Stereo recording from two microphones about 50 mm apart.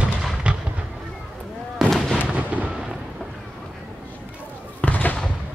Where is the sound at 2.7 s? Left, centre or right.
Centre.